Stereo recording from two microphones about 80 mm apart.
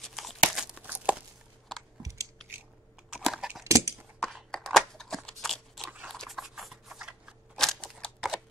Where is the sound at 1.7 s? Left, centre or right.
Centre.